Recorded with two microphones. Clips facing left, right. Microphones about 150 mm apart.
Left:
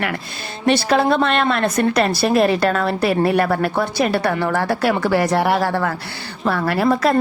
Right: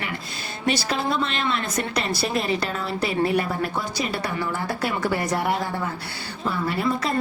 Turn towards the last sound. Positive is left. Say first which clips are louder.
# left 8 dB
turn(degrees=70)  # may be behind; listen again after turning